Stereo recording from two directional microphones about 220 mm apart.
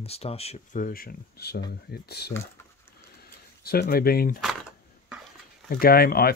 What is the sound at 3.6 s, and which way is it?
Speech, 45° left (ahead or behind).